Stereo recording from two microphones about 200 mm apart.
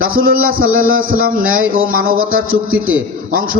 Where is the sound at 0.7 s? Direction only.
90° right.